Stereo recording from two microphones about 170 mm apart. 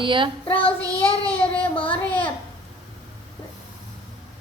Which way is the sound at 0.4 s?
35° left (ahead or behind).